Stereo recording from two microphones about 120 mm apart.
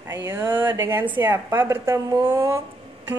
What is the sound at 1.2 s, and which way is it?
Speech, 20° right (ahead or behind).